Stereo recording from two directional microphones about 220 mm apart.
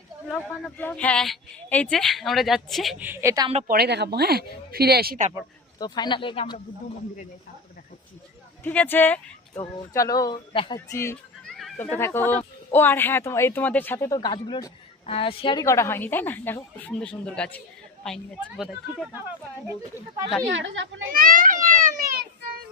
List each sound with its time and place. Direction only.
0.3 s speech: 10° left (ahead or behind); by 3.5 s 15° right (ahead or behind)
3.5 s speech: 30° right (ahead or behind)
3.8 s speech: 50° right (ahead or behind)
5.8 s speech: 20° left (ahead or behind)
8.6 s speech: 5° left (ahead or behind)
10.8 s speech: 10° left (ahead or behind)
20.5 s speech: 60° right (ahead or behind)
21.1 s children playing: 40° right (ahead or behind)